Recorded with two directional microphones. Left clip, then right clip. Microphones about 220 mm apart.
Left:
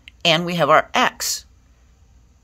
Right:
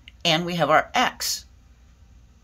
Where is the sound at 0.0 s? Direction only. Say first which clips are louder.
Left 5 dB; 45° left (ahead or behind).